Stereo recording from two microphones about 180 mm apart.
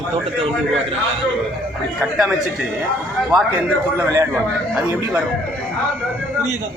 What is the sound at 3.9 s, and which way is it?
Speech, 15° right (ahead or behind).